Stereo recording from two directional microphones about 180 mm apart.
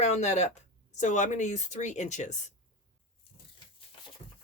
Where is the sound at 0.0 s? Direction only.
40° left (ahead or behind).